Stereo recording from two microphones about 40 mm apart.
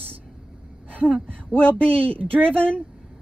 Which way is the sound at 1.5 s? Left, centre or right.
Left.